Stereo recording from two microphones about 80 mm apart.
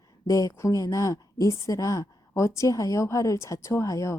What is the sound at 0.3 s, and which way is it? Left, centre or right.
A woman's voice, left.